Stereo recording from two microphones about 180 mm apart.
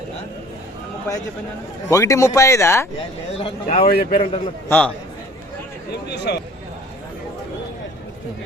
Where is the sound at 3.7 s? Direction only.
55° left (ahead or behind).